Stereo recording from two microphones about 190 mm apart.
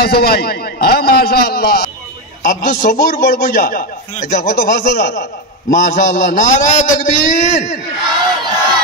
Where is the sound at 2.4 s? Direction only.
45° left (ahead or behind).